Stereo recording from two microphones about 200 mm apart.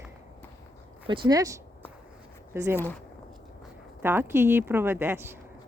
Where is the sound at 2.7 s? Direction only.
10° left (ahead or behind).